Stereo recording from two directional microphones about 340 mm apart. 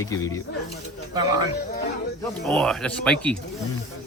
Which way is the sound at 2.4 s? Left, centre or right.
Centre.